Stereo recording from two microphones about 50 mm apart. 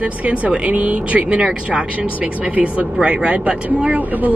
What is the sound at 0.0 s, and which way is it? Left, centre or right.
Speech, right.